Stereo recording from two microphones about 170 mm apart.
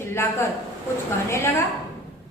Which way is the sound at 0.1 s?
15° left (ahead or behind).